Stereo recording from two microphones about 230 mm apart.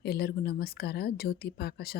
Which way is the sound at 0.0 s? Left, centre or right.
Left.